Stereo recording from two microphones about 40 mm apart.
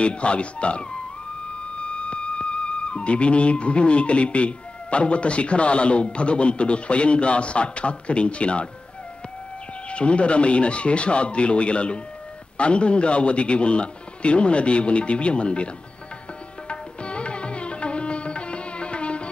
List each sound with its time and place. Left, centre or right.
0.0 s a man's voice: left
9.8 s a man's voice: left
16.6 s music: left